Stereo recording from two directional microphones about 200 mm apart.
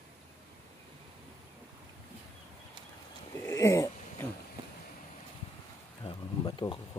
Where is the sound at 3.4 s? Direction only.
15° left (ahead or behind).